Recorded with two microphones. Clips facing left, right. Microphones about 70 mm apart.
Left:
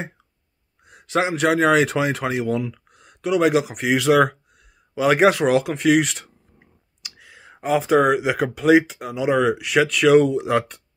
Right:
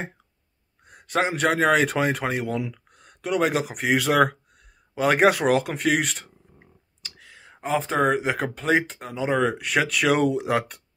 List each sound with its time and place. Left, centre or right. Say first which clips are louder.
0.8 s speech: left 2 dB; centre
7.0 s clicking: left 1 dB; centre
7.6 s speech: left 5 dB; centre